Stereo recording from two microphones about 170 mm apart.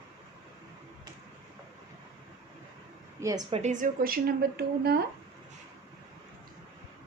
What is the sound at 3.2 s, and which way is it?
Speech, 20° right (ahead or behind).